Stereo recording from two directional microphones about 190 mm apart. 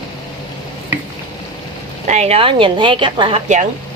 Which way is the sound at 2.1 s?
35° right (ahead or behind).